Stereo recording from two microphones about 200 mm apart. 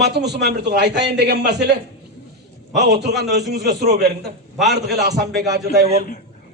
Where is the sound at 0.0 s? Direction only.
55° right (ahead or behind).